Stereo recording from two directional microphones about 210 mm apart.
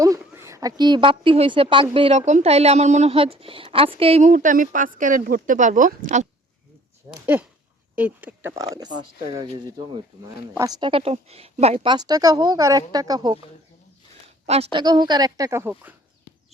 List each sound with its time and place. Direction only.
0.2 s a woman's voice: 10° right (ahead or behind); by 5.9 s 35° right (ahead or behind)
7.1 s a woman's voice: 10° right (ahead or behind)
14.4 s a woman's voice: 30° right (ahead or behind); by 15.7 s 15° right (ahead or behind)